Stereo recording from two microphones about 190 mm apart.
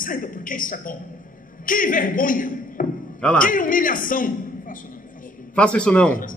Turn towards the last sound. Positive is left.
turn(degrees=5)  # may be behind; listen again after turning